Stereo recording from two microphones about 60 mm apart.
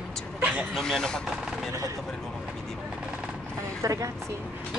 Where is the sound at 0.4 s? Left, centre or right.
Right.